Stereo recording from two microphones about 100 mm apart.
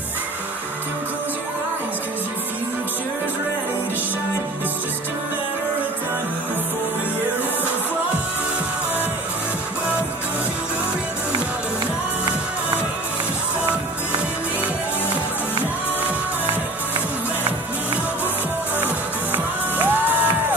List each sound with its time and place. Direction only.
19.3 s music: 20° right (ahead or behind)